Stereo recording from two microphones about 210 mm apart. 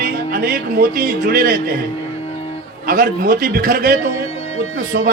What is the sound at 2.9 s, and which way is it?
A man's voice, 40° right (ahead or behind).